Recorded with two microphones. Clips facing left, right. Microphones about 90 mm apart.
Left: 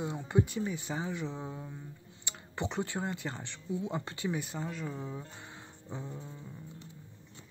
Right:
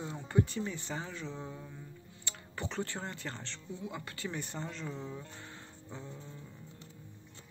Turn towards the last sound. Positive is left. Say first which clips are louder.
# left 4 dB
turn(degrees=15)  # may be behind; listen again after turning